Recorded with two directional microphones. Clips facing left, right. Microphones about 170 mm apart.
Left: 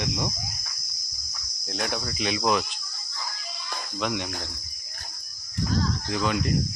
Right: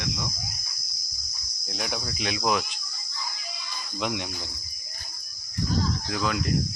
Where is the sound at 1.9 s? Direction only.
5° right (ahead or behind).